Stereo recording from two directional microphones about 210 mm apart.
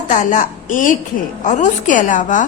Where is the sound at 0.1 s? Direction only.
35° left (ahead or behind).